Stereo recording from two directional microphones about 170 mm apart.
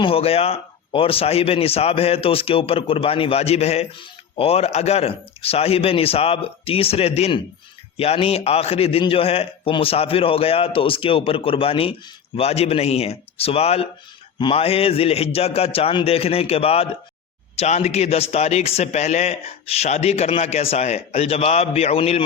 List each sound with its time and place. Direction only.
0.0 s speech: 35° left (ahead or behind)